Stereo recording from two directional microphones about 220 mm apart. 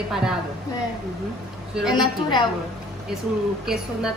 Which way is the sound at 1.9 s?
20° left (ahead or behind).